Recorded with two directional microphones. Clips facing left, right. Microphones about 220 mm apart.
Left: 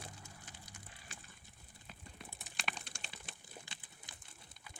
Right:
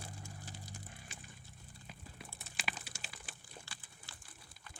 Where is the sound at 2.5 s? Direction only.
5° right (ahead or behind).